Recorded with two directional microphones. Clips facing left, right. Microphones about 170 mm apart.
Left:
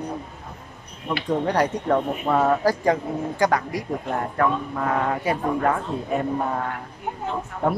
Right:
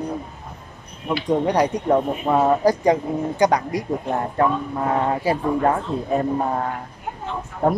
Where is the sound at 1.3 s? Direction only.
15° right (ahead or behind); by 6.2 s 30° right (ahead or behind).